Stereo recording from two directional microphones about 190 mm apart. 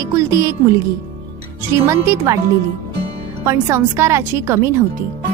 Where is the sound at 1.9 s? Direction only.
15° right (ahead or behind).